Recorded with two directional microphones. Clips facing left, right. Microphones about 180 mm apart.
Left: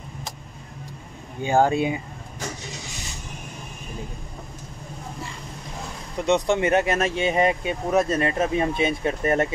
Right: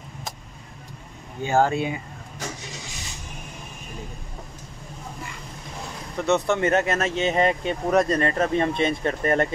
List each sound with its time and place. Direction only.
1.4 s speech: 15° left (ahead or behind)
6.2 s speech: 15° left (ahead or behind)